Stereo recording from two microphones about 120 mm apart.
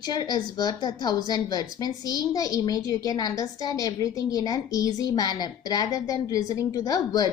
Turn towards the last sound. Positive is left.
turn(degrees=30)  # may be behind; listen again after turning